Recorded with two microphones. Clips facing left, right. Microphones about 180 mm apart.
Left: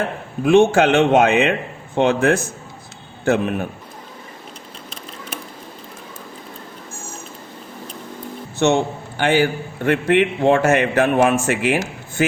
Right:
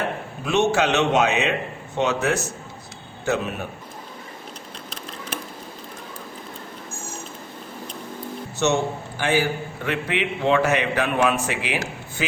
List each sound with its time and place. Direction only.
0.4 s a man's voice: 55° left (ahead or behind)
8.5 s a man's voice: 55° left (ahead or behind)